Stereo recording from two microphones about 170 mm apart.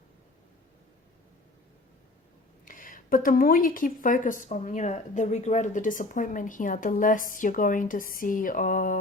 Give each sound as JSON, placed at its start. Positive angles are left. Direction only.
{"t": 2.6, "sound": "speech", "side_deg": 55}